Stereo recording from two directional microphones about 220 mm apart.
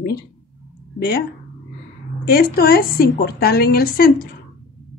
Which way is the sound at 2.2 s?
45° left (ahead or behind).